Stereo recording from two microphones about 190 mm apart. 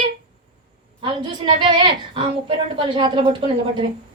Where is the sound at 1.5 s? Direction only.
25° right (ahead or behind).